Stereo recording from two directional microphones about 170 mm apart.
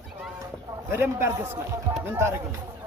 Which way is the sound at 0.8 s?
15° right (ahead or behind).